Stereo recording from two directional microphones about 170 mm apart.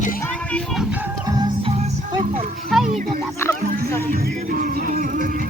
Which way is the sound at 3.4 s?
15° left (ahead or behind).